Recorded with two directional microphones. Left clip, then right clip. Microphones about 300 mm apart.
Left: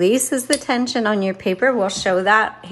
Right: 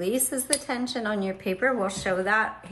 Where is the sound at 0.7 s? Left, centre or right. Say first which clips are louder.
Left 10 dB; left.